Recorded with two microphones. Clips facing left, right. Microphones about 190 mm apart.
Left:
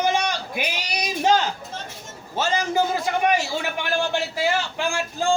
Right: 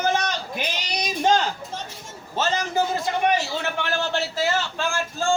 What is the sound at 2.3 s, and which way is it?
A man's voice, 10° left (ahead or behind).